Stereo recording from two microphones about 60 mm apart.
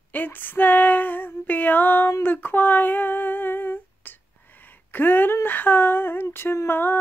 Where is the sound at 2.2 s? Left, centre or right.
Left.